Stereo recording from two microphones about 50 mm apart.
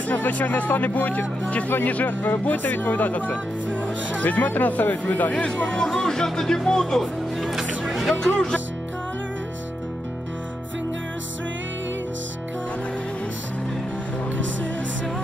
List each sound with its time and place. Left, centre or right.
0.1 s speech: left
5.7 s speech: centre
7.5 s music: centre